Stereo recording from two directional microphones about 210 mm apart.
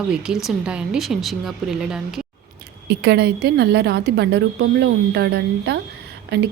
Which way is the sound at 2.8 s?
55° right (ahead or behind).